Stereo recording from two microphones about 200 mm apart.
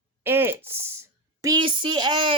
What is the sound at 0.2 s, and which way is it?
A woman's voice, 10° right (ahead or behind).